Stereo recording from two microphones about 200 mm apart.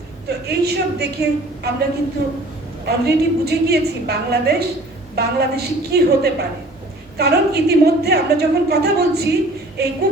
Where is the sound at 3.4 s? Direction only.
55° right (ahead or behind).